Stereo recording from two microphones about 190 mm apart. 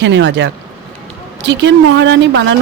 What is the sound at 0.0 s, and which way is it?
Speech, 70° right (ahead or behind).